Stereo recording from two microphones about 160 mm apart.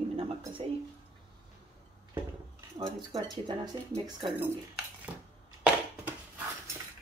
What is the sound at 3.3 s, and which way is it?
Speech, 25° right (ahead or behind).